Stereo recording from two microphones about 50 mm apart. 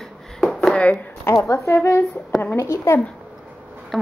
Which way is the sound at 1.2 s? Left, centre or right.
Left.